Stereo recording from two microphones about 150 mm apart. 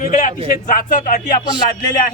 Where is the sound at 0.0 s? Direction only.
60° left (ahead or behind).